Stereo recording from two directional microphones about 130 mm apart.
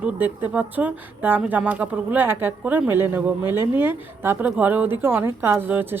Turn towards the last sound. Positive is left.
turn(degrees=-15)  # may be behind; listen again after turning